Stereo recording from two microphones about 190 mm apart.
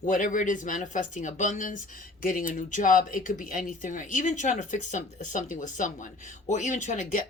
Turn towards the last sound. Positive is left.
turn(degrees=40)  # may be behind; listen again after turning